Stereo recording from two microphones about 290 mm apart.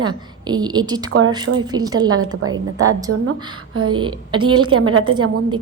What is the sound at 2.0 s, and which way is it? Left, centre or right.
A woman's voice, right.